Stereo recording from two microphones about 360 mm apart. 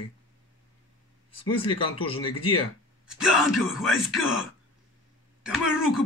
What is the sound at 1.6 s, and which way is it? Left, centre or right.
Speech, centre.